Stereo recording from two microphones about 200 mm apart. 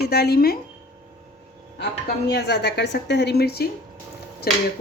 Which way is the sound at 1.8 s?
55° left (ahead or behind).